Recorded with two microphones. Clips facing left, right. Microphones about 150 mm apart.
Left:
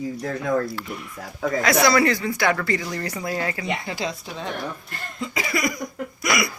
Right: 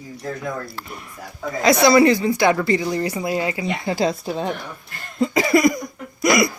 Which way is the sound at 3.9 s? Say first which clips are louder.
Right 8 dB; 40° right (ahead or behind).